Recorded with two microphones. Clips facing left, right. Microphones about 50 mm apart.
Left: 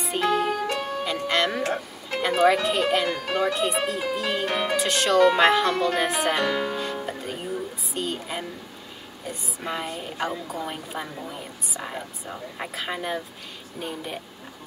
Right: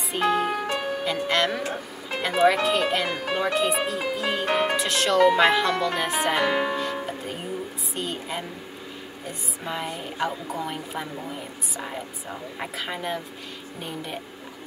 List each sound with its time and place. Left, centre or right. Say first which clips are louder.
0.0 s music: even; centre
0.5 s music: left 1 dB; right
1.0 s speech: even; centre
3.5 s music: right 1 dB; centre
4.7 s speech: left 5 dB; centre
6.5 s speech: right 2 dB; right
6.8 s music: right 1 dB; centre
7.9 s a sound: left 1 dB; centre
9.3 s speech: left 1 dB; centre